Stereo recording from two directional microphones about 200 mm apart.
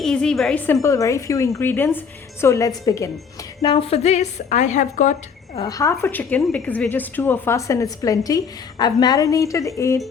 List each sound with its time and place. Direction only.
0.0 s a woman's voice: 5° left (ahead or behind); by 5.1 s 40° left (ahead or behind)
5.5 s a woman's voice: 20° left (ahead or behind)